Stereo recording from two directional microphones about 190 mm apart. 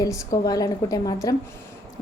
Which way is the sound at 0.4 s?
20° left (ahead or behind).